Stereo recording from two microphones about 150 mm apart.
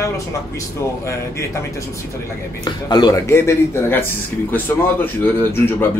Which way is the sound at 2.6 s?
25° left (ahead or behind).